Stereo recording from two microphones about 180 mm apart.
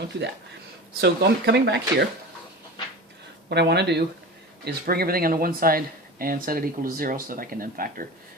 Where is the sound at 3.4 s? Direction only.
70° right (ahead or behind).